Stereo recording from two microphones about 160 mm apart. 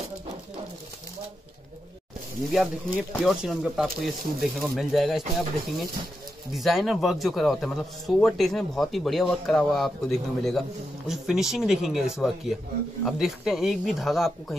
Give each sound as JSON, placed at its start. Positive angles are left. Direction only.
{"t": 2.5, "sound": "speech", "side_deg": 0}
{"t": 6.5, "sound": "speech", "side_deg": 0}